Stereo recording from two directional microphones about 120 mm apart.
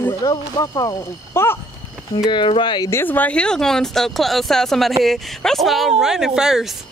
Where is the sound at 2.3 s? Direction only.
40° left (ahead or behind).